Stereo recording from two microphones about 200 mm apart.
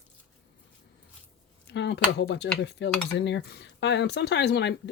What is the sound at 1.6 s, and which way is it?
Speech, 60° left (ahead or behind).